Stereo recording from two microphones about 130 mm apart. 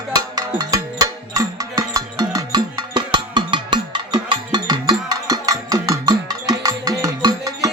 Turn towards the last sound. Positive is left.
turn(degrees=-25)  # may be behind; listen again after turning